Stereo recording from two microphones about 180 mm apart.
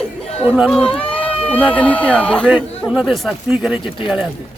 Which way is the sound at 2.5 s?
5° right (ahead or behind).